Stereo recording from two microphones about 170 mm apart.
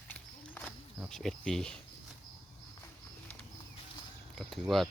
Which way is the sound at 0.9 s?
Centre (ahead or behind).